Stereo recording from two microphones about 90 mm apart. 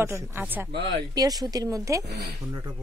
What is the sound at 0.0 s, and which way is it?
Speech, 30° right (ahead or behind).